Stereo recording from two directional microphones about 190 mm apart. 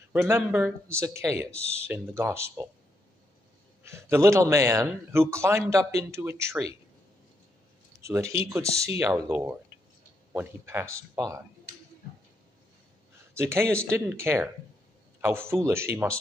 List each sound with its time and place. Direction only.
0.1 s a man's voice: 10° right (ahead or behind)
3.8 s a man's voice: 15° right (ahead or behind)
8.0 s a man's voice: 15° right (ahead or behind)
13.3 s a man's voice: 15° right (ahead or behind)